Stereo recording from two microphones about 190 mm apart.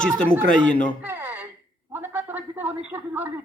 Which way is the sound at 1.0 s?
10° right (ahead or behind).